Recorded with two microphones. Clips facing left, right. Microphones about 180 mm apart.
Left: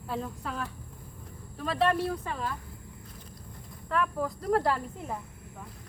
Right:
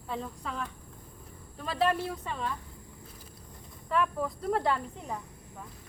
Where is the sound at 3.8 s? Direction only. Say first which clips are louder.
Even; centre (ahead or behind).